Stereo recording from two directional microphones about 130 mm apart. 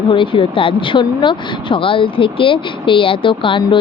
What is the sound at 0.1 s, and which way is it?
Speech, 40° left (ahead or behind).